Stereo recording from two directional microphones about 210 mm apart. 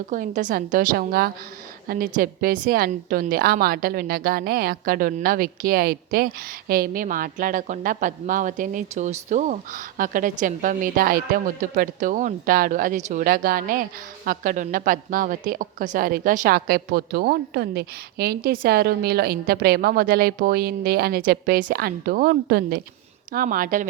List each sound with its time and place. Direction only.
0.1 s a woman's voice: 40° right (ahead or behind)